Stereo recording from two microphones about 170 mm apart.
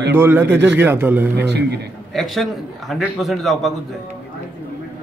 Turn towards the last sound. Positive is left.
turn(degrees=0)  # may be behind; listen again after turning